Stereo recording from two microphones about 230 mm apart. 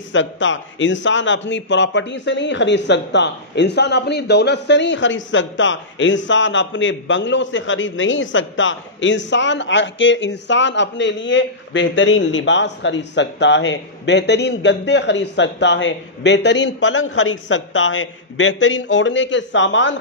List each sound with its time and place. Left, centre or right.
0.1 s a man's voice: left